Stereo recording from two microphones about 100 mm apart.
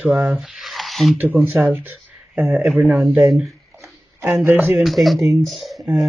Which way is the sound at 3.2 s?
Centre (ahead or behind).